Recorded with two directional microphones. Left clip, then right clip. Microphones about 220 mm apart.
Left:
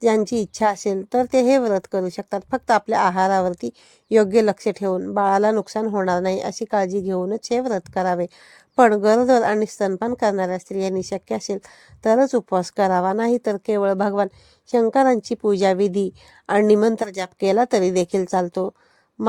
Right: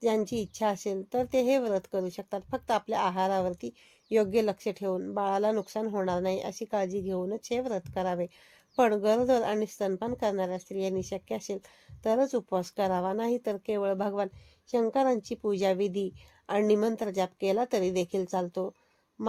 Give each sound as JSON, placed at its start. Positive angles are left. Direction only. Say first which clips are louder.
{"t": 0.0, "sound": "a woman's voice", "louder": "left 10 dB", "side_deg": 35}